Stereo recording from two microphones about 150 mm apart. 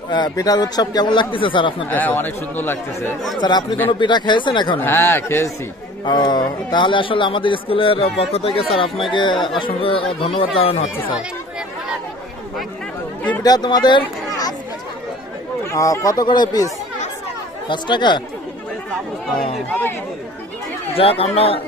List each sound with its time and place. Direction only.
0.1 s a man's voice: 25° left (ahead or behind)
1.9 s speech: 10° left (ahead or behind)
3.3 s a man's voice: 30° left (ahead or behind)
4.7 s speech: 15° left (ahead or behind)
6.0 s a man's voice: 30° left (ahead or behind)
13.3 s speech: 25° left (ahead or behind)
15.6 s speech: 20° left (ahead or behind)
17.6 s a man's voice: 30° left (ahead or behind)
19.7 s speech: 10° left (ahead or behind)
20.9 s a man's voice: 40° left (ahead or behind)